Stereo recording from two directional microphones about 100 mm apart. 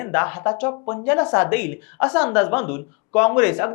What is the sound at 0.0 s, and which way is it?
Speech, 20° left (ahead or behind).